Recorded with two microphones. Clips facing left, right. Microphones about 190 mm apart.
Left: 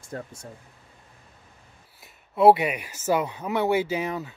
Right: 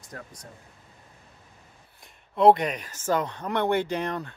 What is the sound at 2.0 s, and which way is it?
Speech, 5° left (ahead or behind).